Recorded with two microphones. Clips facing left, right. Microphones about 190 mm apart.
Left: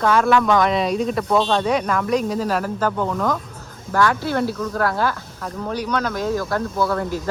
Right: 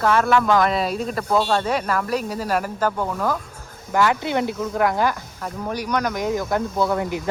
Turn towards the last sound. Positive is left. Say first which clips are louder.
# even
turn(degrees=-15)  # may be behind; listen again after turning